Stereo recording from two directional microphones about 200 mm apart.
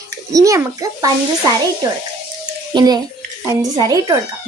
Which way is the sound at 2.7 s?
20° right (ahead or behind).